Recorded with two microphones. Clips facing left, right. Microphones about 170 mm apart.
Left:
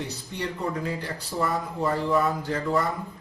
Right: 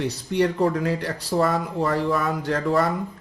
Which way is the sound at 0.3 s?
65° right (ahead or behind).